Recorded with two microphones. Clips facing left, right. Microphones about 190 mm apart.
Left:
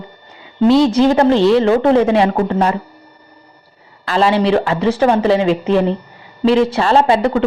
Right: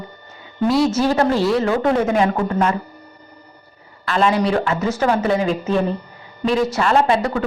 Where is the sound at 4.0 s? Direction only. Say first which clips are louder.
Left 3 dB; 30° left (ahead or behind).